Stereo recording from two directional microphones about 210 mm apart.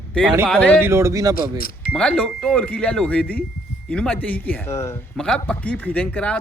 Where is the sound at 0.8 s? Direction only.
10° right (ahead or behind).